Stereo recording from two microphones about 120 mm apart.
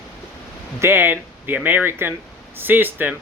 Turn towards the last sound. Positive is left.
turn(degrees=-15)  # may be behind; listen again after turning